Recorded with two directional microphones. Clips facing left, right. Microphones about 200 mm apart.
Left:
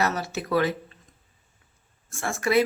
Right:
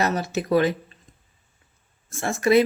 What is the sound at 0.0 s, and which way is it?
Speech, 20° right (ahead or behind).